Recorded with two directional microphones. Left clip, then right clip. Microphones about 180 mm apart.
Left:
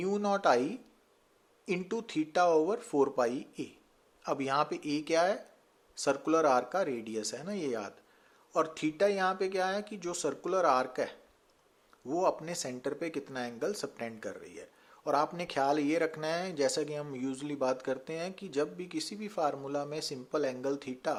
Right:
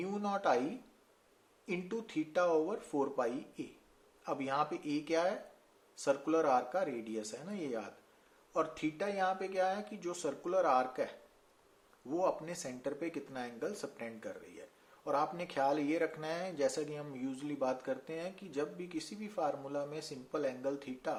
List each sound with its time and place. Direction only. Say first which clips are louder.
0.0 s speech: left 6 dB; 50° left (ahead or behind)